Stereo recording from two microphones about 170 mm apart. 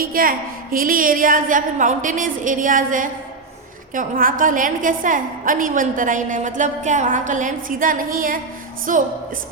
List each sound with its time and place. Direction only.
0.0 s a woman's voice: 55° right (ahead or behind)